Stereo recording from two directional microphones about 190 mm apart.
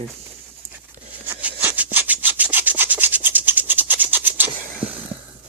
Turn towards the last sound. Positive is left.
turn(degrees=-10)  # may be behind; listen again after turning